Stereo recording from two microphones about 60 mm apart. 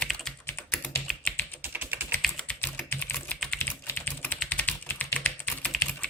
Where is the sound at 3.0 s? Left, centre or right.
Left.